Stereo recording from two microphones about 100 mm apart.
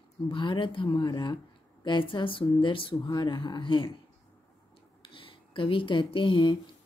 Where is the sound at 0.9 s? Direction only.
45° left (ahead or behind); by 3.0 s 60° left (ahead or behind).